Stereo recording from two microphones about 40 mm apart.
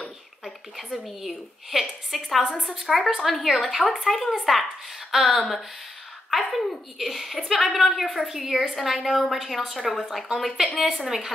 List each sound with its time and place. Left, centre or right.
0.7 s a woman's voice: centre
3.3 s a woman's voice: centre